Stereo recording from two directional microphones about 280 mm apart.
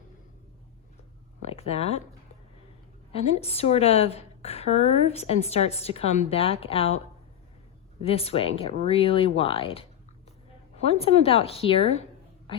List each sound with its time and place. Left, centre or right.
1.4 s speech: left
3.1 s a woman's voice: left
8.0 s a woman's voice: left
10.8 s a woman's voice: left